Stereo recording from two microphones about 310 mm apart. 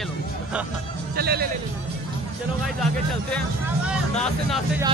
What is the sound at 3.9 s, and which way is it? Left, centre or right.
Speech, centre.